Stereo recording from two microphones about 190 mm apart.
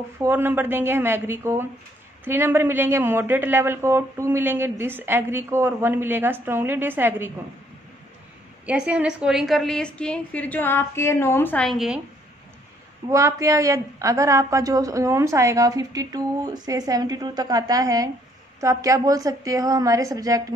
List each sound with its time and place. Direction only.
0.2 s speech: 10° right (ahead or behind)
8.6 s a woman's voice: 5° right (ahead or behind)
13.1 s speech: 15° right (ahead or behind)